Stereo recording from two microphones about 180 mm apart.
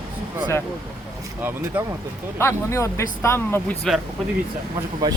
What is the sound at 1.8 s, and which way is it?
Speech, 10° right (ahead or behind).